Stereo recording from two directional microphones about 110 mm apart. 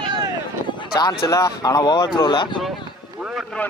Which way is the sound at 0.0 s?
40° right (ahead or behind).